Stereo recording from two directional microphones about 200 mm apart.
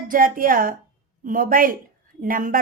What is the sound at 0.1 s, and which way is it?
A woman's voice, 45° right (ahead or behind).